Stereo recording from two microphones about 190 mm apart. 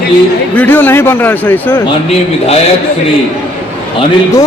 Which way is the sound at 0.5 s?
10° left (ahead or behind).